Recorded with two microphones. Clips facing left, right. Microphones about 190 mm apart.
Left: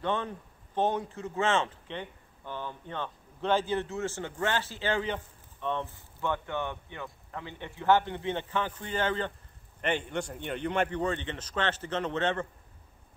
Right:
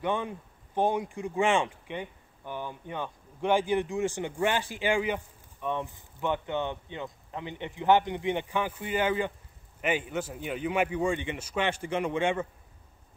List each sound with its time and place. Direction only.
0.0 s speech: 10° right (ahead or behind)